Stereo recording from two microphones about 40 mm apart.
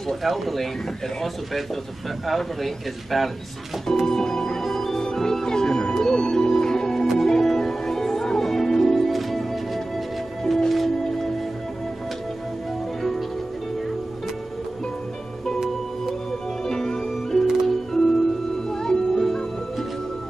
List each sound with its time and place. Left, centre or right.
0.1 s a man's voice: centre
2.2 s a man's voice: centre
4.0 s organ: centre
5.0 s music: centre
16.3 s music: centre